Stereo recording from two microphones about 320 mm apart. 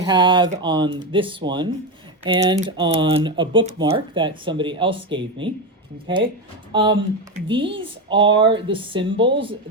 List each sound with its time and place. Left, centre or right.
0.0 s a woman's voice: centre
6.7 s a woman's voice: centre